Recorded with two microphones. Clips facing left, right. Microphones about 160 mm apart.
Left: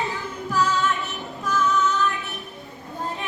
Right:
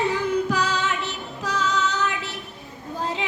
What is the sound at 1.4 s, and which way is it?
Female singing, 80° right.